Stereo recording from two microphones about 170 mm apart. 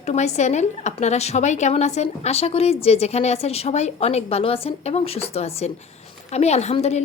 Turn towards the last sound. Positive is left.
turn(degrees=40)  # may be behind; listen again after turning